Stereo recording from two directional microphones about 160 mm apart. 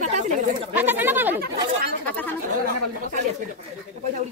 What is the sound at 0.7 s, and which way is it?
Speech, 10° right (ahead or behind).